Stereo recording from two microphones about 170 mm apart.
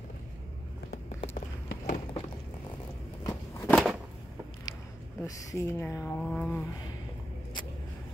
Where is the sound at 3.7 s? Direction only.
Centre (ahead or behind).